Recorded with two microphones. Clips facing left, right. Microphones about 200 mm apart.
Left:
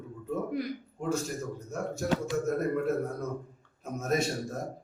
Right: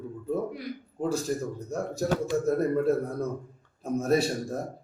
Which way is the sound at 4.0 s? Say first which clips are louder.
Right 5 dB; 35° right (ahead or behind).